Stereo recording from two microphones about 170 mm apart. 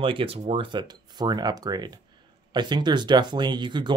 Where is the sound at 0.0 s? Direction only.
30° right (ahead or behind).